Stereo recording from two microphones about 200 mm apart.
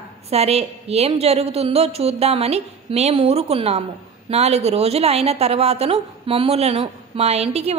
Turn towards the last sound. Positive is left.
turn(degrees=-30)  # may be behind; listen again after turning